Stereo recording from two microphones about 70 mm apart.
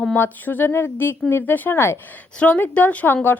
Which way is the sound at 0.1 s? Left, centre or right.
Left.